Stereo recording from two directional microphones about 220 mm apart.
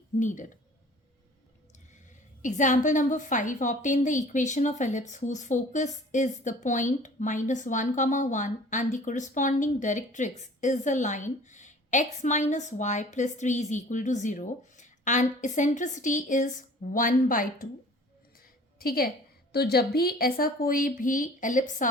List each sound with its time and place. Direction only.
0.2 s a woman's voice: 35° left (ahead or behind)
2.4 s a woman's voice: 35° left (ahead or behind)
18.8 s a woman's voice: 45° left (ahead or behind)